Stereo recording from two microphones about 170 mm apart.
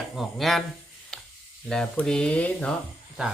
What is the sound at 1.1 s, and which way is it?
Sizzle, 5° left (ahead or behind).